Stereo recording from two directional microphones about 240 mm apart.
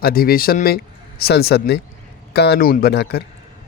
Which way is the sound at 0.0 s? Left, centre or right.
Left.